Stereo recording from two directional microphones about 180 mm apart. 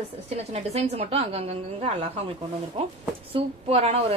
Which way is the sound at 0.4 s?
35° right (ahead or behind).